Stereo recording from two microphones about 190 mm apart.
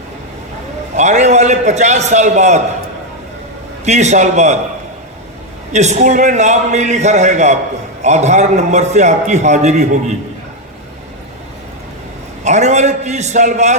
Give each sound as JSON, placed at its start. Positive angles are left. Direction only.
{"t": 0.9, "sound": "a man's voice", "side_deg": -35}
{"t": 3.8, "sound": "a man's voice", "side_deg": -35}
{"t": 5.7, "sound": "a man's voice", "side_deg": -35}
{"t": 12.5, "sound": "a man's voice", "side_deg": -35}